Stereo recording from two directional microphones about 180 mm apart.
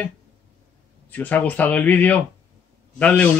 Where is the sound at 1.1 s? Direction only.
10° left (ahead or behind).